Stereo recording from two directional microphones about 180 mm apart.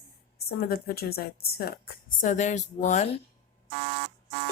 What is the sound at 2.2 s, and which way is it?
Speech, 40° left (ahead or behind).